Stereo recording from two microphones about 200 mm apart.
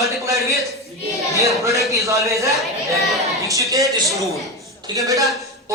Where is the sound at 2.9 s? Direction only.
Centre (ahead or behind).